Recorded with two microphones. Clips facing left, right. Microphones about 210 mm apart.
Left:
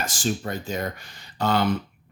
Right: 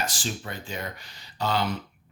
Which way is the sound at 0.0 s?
45° left (ahead or behind).